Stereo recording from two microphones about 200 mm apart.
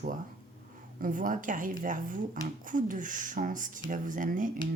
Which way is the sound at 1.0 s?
45° right (ahead or behind).